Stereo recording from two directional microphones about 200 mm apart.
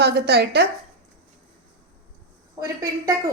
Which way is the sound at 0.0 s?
55° right (ahead or behind).